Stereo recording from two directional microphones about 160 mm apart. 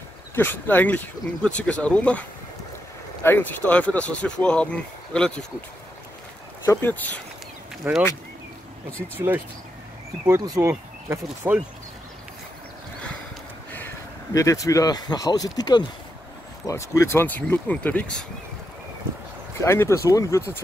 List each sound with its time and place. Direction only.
0.3 s speech: 15° left (ahead or behind)
3.3 s speech: 10° left (ahead or behind)
6.6 s speech: 15° left (ahead or behind)
7.8 s speech: 10° right (ahead or behind)
10.2 s speech: 20° right (ahead or behind)
13.7 s speech: 15° left (ahead or behind)
19.6 s speech: 15° left (ahead or behind)